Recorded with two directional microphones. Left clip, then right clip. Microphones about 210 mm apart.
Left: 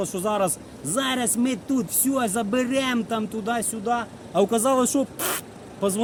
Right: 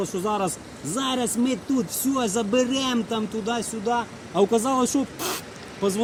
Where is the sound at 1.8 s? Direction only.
35° left (ahead or behind).